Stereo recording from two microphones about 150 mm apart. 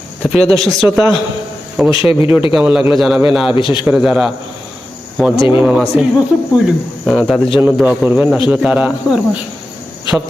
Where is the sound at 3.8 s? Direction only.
5° right (ahead or behind).